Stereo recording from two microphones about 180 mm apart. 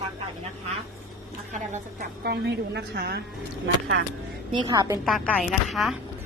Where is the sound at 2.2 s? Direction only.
65° right (ahead or behind).